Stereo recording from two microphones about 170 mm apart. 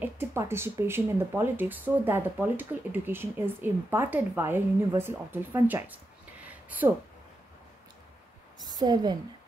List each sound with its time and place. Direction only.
0.0 s speech: 15° right (ahead or behind)
6.4 s a sound: 10° right (ahead or behind)
8.6 s a woman's voice: 25° right (ahead or behind)